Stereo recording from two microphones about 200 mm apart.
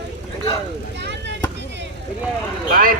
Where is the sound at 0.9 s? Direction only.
60° right (ahead or behind).